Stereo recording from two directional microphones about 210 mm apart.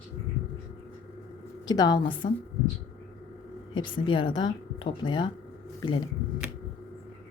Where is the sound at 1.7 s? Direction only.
20° left (ahead or behind).